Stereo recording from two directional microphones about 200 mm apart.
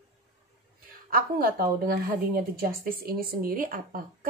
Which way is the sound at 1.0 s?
45° right (ahead or behind).